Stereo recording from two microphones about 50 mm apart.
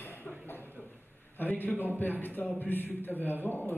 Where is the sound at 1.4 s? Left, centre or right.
Left.